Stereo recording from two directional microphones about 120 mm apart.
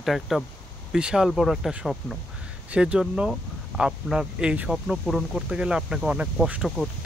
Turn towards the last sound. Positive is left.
turn(degrees=-10)  # may be behind; listen again after turning